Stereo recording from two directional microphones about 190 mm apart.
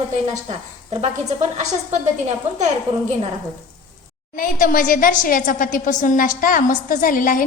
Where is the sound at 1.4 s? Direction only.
40° right (ahead or behind).